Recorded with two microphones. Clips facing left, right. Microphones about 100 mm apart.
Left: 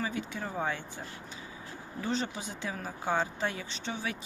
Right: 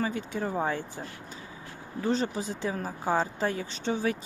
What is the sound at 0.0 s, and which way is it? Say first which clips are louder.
Speech: right 5 dB; 40° right (ahead or behind).